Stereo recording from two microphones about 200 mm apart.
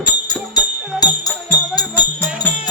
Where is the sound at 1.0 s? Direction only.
20° left (ahead or behind).